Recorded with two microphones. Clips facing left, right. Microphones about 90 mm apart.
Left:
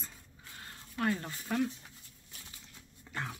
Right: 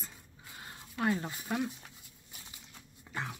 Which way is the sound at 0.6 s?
10° right (ahead or behind).